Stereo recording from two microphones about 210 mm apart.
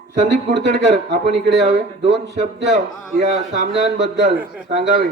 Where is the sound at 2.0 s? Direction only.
55° right (ahead or behind).